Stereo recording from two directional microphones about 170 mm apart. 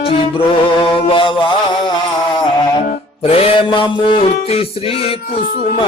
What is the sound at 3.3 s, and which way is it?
Music, 35° left (ahead or behind).